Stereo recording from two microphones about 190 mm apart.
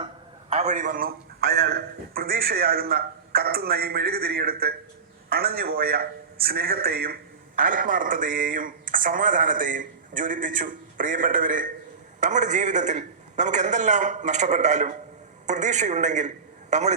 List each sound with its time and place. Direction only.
0.5 s a man's voice: 40° right (ahead or behind)